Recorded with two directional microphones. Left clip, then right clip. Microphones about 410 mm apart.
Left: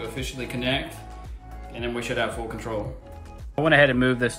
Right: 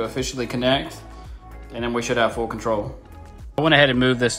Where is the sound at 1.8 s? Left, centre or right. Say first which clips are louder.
Right 6 dB; centre.